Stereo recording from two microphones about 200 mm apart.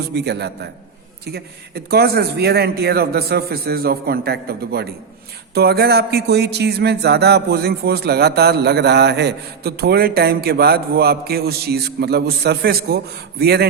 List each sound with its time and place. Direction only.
0.0 s a man's voice: 55° right (ahead or behind)